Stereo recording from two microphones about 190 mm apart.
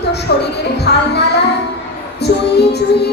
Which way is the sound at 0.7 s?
60° left (ahead or behind).